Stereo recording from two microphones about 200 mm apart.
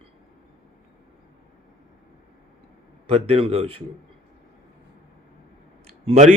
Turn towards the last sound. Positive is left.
turn(degrees=-35)  # may be behind; listen again after turning